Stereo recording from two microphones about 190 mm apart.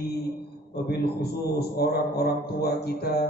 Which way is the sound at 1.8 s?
60° left (ahead or behind).